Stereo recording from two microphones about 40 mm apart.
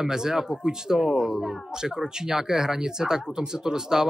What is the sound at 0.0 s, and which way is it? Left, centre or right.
Speech, centre.